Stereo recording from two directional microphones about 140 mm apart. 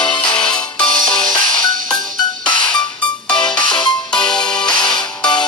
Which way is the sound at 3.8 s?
30° left (ahead or behind).